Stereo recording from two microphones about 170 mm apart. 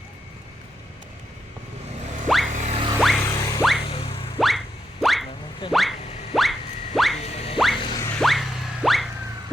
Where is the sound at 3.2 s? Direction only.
20° left (ahead or behind).